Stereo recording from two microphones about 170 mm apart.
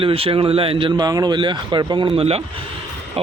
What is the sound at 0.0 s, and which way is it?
A man's voice, 35° right (ahead or behind).